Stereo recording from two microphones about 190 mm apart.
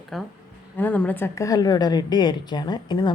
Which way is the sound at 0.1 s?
Centre (ahead or behind).